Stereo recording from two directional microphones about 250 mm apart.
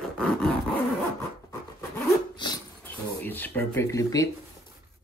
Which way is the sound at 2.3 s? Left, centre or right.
Centre.